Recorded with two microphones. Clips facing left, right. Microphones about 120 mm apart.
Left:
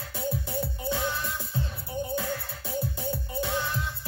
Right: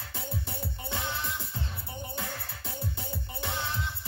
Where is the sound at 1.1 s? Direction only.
20° right (ahead or behind).